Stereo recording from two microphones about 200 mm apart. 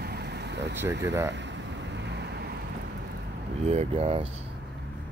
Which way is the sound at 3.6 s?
30° right (ahead or behind).